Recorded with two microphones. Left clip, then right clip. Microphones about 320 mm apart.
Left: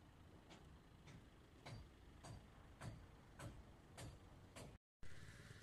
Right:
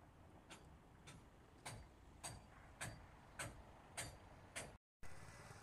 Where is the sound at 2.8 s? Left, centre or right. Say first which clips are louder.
Right 7 dB; right.